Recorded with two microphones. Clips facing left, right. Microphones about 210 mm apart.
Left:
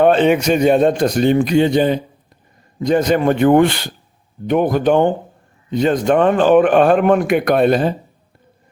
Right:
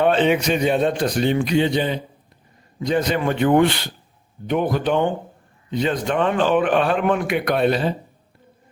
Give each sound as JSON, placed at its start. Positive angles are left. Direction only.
{"t": 0.0, "sound": "a man's voice", "side_deg": 45}